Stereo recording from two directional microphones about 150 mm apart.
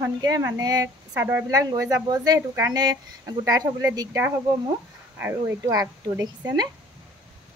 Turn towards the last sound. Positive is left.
turn(degrees=-25)  # may be behind; listen again after turning